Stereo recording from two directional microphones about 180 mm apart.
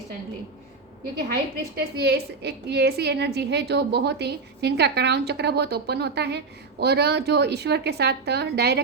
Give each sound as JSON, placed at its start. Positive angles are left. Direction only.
{"t": 1.7, "sound": "a woman's voice", "side_deg": -65}